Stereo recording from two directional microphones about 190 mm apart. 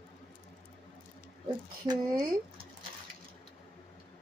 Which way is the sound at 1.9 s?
25° right (ahead or behind).